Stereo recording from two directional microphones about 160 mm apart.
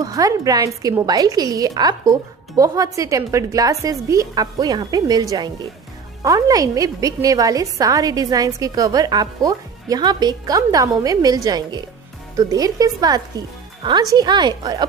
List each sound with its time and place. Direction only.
0.0 s a woman's voice: 20° right (ahead or behind)